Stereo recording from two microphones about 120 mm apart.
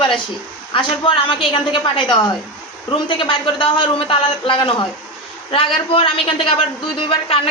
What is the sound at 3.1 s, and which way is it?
A woman's voice, 45° left (ahead or behind).